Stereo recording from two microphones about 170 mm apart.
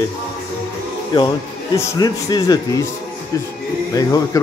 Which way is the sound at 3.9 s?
20° left (ahead or behind).